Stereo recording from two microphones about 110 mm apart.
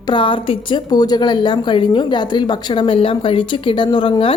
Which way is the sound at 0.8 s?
40° left (ahead or behind).